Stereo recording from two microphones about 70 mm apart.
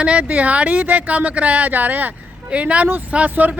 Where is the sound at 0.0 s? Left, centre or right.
Centre.